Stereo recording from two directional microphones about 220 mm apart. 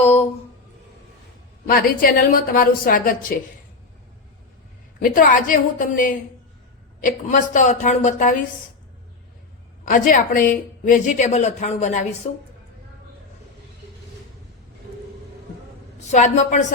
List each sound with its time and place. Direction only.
0.0 s a sound: 30° left (ahead or behind)
1.6 s a woman's voice: 40° left (ahead or behind)
5.0 s a woman's voice: 40° left (ahead or behind)
9.8 s a woman's voice: 40° left (ahead or behind)
16.1 s a woman's voice: 30° left (ahead or behind)